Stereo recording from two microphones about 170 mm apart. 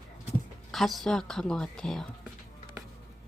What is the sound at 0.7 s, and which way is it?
Speech, centre (ahead or behind).